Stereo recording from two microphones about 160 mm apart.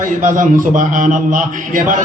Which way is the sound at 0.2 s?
50° right (ahead or behind).